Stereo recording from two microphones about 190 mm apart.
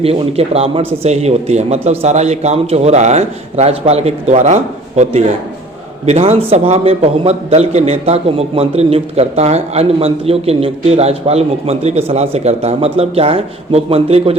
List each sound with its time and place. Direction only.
0.0 s a man's voice: 30° right (ahead or behind)